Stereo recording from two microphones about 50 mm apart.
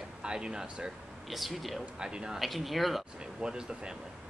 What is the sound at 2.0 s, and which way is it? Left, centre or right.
Speech, centre.